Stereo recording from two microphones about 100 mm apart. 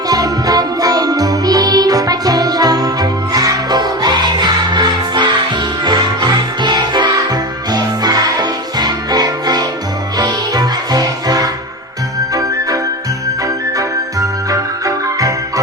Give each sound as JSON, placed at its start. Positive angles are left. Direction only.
{"t": 0.1, "sound": "music", "side_deg": -40}